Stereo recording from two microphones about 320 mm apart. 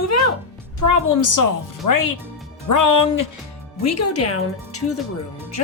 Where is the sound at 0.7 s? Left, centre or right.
Left.